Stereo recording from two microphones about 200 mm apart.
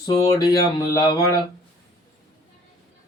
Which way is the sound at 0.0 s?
20° left (ahead or behind).